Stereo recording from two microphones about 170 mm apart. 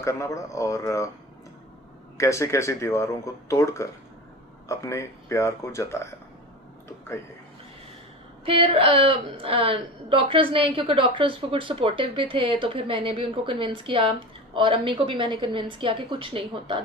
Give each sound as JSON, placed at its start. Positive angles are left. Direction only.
{"t": 0.0, "sound": "speech", "side_deg": 15}
{"t": 2.1, "sound": "speech", "side_deg": 15}
{"t": 8.4, "sound": "a woman's voice", "side_deg": -30}